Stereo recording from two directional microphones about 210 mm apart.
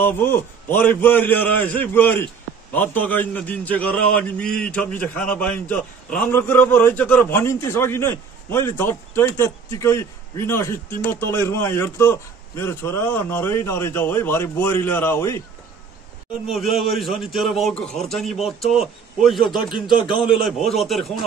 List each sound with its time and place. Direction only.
0.0 s a man's voice: 10° left (ahead or behind)
16.4 s a man's voice: centre (ahead or behind)
19.9 s a man's voice: 25° left (ahead or behind)
20.7 s a man's voice: centre (ahead or behind)